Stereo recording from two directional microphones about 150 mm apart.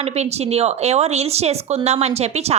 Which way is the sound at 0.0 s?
45° right (ahead or behind).